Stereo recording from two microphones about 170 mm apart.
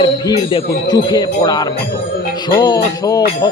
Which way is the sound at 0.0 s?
25° left (ahead or behind).